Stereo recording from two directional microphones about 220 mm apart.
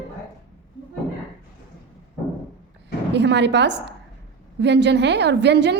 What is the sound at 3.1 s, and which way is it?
A woman's voice, 50° right (ahead or behind).